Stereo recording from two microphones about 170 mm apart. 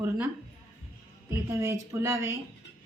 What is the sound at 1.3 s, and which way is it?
A woman's voice, 20° right (ahead or behind).